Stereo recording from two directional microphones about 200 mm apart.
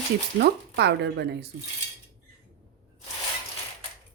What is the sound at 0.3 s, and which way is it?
A woman's voice, 55° right (ahead or behind).